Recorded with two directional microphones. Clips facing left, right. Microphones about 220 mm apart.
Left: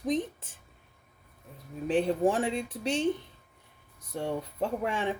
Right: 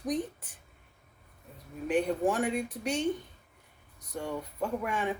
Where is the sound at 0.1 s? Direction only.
25° left (ahead or behind).